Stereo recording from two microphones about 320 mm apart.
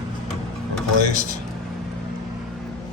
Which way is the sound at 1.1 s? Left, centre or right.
Left.